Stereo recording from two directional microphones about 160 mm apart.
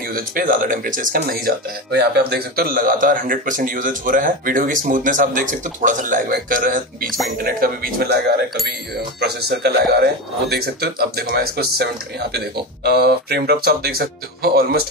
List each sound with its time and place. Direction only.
0.1 s speech: 60° right (ahead or behind)
9.2 s speech: 85° right